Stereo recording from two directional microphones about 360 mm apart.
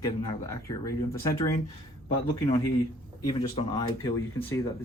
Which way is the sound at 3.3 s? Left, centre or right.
Centre.